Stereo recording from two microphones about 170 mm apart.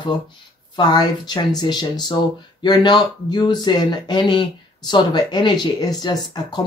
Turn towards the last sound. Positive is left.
turn(degrees=25)  # may be behind; listen again after turning